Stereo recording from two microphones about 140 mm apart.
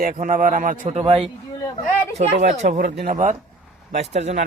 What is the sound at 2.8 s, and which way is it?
Speech, 80° right.